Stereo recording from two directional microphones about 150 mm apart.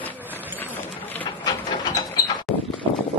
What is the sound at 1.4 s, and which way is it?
Mechanisms, 30° left (ahead or behind).